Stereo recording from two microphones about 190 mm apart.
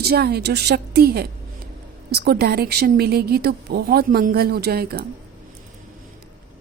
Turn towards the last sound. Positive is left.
turn(degrees=-55)  # may be behind; listen again after turning